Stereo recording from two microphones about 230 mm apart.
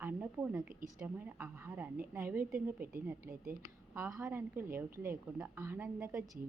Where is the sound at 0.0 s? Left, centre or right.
Centre.